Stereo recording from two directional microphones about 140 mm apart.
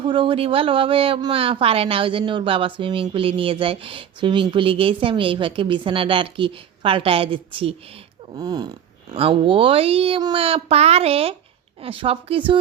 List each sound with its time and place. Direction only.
0.0 s a woman's voice: 35° right (ahead or behind)
8.4 s speech: 30° right (ahead or behind)
9.1 s a child's voice: 40° right (ahead or behind)